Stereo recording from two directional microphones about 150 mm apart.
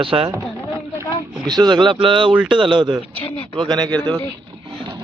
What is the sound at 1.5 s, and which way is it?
Speech, 30° right (ahead or behind).